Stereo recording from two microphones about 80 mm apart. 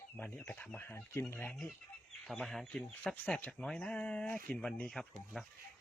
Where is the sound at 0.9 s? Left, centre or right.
Left.